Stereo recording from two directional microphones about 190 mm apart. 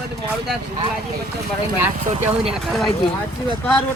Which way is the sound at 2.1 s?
35° right (ahead or behind).